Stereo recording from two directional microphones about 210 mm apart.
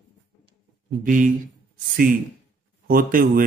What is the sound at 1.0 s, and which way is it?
Speech, 40° right (ahead or behind).